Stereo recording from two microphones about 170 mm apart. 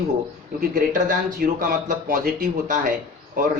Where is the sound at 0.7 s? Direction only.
50° right (ahead or behind).